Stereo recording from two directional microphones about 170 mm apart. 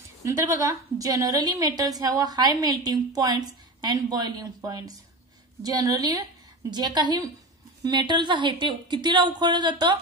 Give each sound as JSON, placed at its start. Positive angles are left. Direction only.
{"t": 0.2, "sound": "a woman's voice", "side_deg": -20}